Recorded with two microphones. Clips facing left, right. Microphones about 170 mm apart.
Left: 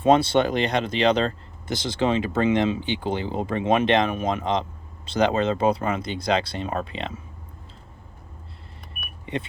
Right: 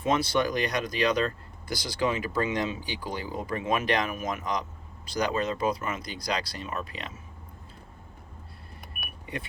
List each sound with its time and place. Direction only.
0.0 s speech: 30° left (ahead or behind)
9.2 s vehicle: 25° left (ahead or behind)